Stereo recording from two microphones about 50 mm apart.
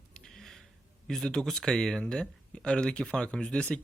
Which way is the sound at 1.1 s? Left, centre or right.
Centre.